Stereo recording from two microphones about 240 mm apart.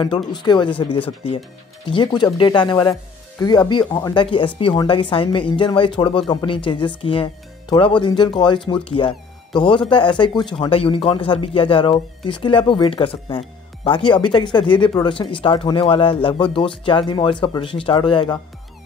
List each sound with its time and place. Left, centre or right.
0.0 s speech: centre